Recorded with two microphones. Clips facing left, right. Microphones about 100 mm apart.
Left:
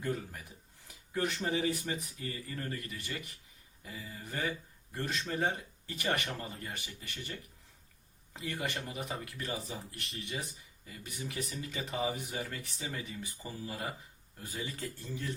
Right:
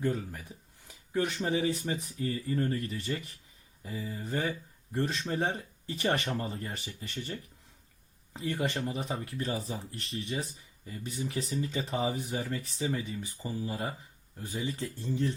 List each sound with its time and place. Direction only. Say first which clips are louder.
0.0 s speech: right 5 dB; 25° right (ahead or behind)
8.4 s speech: right 6 dB; 30° right (ahead or behind)